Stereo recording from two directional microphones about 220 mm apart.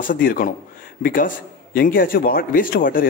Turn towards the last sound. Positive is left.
turn(degrees=40)  # may be behind; listen again after turning